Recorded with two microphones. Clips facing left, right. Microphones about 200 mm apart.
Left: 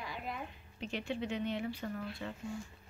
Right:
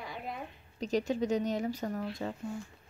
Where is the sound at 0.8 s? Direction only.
40° right (ahead or behind).